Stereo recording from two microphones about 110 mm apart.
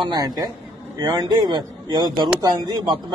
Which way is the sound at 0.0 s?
40° right (ahead or behind).